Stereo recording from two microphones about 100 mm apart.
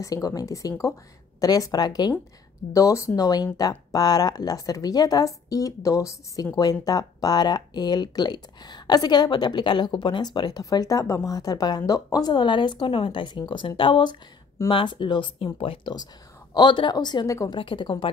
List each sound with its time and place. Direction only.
0.0 s a woman's voice: 40° left (ahead or behind)
2.7 s a woman's voice: 30° left (ahead or behind); by 15.9 s 60° left (ahead or behind)
16.5 s speech: 50° left (ahead or behind)